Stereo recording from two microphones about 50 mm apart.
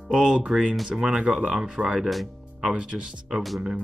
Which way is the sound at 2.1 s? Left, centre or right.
Centre.